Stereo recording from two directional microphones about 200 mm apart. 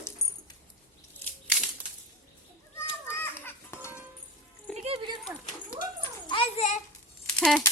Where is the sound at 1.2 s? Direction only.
Centre (ahead or behind).